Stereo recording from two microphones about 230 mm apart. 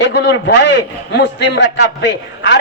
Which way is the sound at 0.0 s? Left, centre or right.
Left.